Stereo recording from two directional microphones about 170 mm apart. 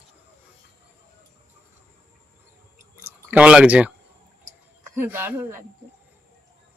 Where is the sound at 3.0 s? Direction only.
10° right (ahead or behind).